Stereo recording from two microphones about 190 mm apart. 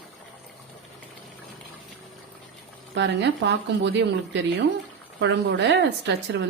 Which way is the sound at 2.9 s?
65° right (ahead or behind).